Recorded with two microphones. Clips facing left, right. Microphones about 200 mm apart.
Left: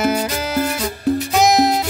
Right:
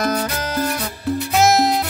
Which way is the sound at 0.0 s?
10° left (ahead or behind).